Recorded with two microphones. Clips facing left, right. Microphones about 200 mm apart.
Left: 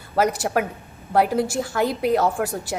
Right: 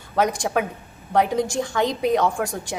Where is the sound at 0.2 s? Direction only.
5° left (ahead or behind).